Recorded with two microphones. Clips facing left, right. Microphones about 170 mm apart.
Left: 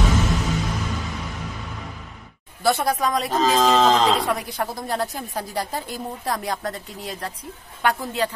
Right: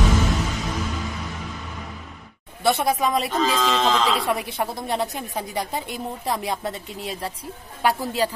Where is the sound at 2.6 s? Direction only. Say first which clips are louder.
Even; centre (ahead or behind).